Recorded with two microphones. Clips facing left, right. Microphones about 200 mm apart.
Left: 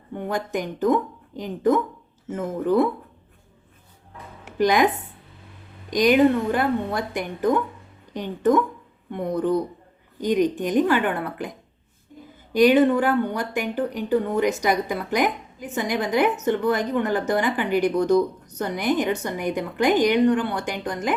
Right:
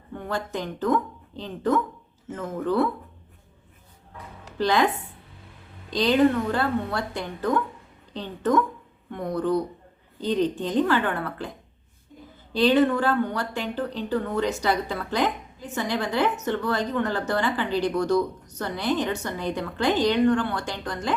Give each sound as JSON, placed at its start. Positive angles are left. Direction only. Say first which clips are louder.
{"t": 0.1, "sound": "speech", "louder": "left 4 dB", "side_deg": 20}
{"t": 4.5, "sound": "speech", "louder": "left 3 dB", "side_deg": 15}
{"t": 5.9, "sound": "speech", "louder": "left 3 dB", "side_deg": 15}
{"t": 12.5, "sound": "speech", "louder": "left 4 dB", "side_deg": 15}